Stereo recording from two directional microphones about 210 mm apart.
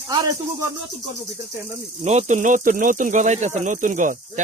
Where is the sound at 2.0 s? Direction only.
35° right (ahead or behind).